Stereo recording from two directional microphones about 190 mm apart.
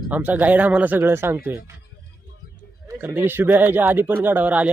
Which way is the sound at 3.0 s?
10° right (ahead or behind).